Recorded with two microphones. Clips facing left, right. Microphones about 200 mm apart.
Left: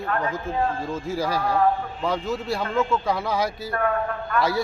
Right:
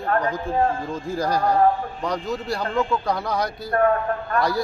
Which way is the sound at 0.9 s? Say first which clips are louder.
Right 1 dB; 5° left (ahead or behind).